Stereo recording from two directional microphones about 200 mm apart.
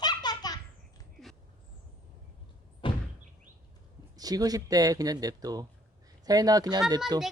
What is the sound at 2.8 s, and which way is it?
Door, 25° left (ahead or behind).